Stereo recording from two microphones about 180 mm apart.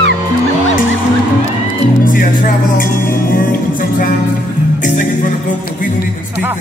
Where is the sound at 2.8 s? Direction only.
50° left (ahead or behind).